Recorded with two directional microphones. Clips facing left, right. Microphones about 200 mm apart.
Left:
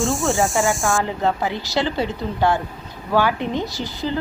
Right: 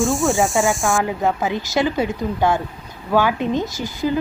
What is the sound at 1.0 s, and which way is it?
A woman's voice, 15° right (ahead or behind).